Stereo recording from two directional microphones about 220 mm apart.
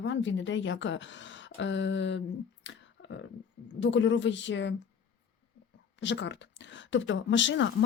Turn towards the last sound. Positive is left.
turn(degrees=55)  # may be behind; listen again after turning